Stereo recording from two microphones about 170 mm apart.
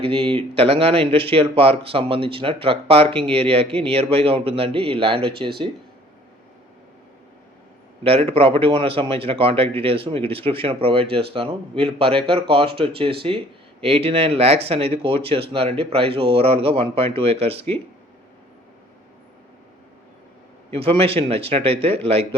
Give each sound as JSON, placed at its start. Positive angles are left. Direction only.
{"t": 0.0, "sound": "speech", "side_deg": -30}
{"t": 8.0, "sound": "speech", "side_deg": -35}
{"t": 20.7, "sound": "speech", "side_deg": -35}